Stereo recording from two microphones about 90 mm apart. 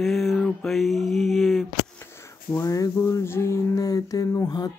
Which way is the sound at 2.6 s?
40° left (ahead or behind).